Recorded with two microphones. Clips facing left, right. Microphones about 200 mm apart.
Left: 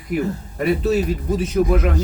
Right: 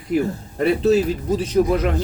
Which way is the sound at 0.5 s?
30° right (ahead or behind).